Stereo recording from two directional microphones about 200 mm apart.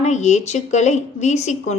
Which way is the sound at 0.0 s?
35° left (ahead or behind).